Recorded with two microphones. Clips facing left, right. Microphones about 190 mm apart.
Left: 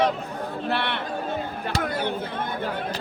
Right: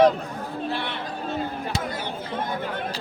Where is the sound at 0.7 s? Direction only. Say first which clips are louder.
Left 3 dB; 65° left (ahead or behind).